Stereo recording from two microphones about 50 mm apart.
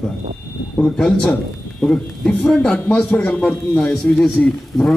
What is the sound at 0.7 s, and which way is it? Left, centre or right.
A man's voice, centre.